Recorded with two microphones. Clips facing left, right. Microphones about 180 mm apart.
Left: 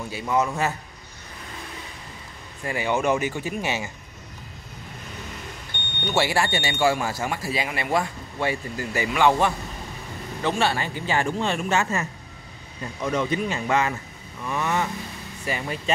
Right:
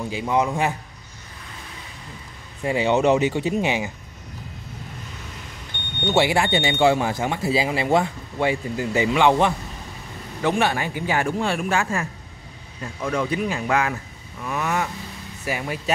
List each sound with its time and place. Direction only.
0.1 s speech: 15° right (ahead or behind)
2.6 s speech: 20° right (ahead or behind)
6.0 s speech: 20° right (ahead or behind)
11.8 s speech: centre (ahead or behind)
13.2 s speech: 5° right (ahead or behind)
14.4 s vehicle: 5° right (ahead or behind)
15.4 s speech: 10° right (ahead or behind)